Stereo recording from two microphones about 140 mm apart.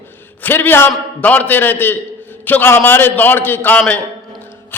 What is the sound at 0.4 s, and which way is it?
A man's voice, 15° left (ahead or behind).